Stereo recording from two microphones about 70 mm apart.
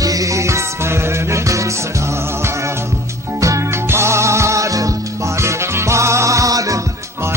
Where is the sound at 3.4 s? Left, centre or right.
Right.